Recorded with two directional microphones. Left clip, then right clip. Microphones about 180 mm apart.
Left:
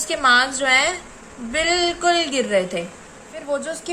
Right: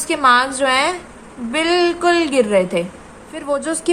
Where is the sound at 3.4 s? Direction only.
45° right (ahead or behind).